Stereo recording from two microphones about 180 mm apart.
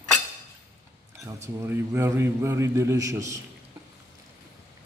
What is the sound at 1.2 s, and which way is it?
A man's voice, 15° right (ahead or behind).